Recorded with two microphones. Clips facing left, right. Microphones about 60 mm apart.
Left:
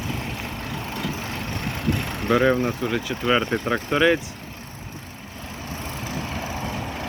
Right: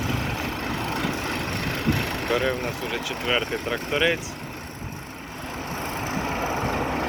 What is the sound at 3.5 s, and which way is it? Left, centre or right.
Speech, left.